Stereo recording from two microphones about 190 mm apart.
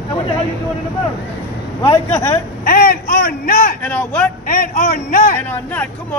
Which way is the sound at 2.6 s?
50° left (ahead or behind).